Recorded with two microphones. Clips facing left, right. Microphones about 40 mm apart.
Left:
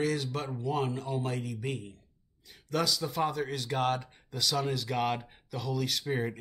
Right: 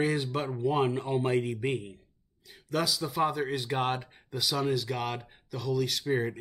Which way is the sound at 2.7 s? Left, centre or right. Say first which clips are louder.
Right 1 dB; centre.